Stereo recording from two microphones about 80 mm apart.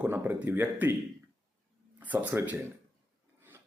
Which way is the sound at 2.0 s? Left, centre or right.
Right.